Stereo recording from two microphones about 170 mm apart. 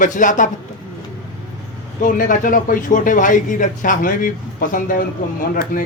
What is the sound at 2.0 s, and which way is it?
Speech, 50° left (ahead or behind).